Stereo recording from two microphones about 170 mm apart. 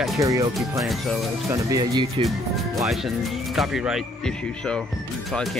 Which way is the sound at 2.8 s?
Centre (ahead or behind).